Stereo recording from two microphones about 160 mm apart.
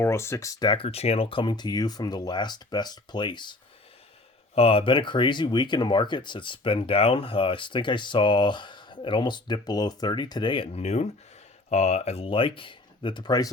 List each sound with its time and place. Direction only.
0.0 s speech: 15° left (ahead or behind)